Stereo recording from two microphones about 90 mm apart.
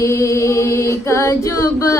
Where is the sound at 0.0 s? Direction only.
35° left (ahead or behind).